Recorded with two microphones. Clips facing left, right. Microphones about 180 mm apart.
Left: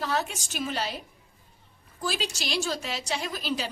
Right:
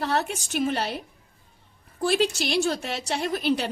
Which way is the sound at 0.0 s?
60° right (ahead or behind).